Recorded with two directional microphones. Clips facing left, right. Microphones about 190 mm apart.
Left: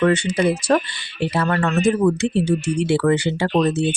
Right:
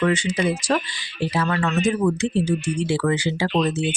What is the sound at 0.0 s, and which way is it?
Speech, 55° left (ahead or behind).